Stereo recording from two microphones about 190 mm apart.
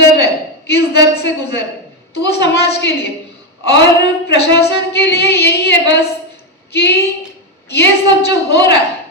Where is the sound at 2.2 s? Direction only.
65° left (ahead or behind).